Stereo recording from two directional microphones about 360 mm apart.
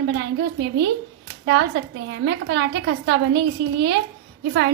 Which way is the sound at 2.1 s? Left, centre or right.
Right.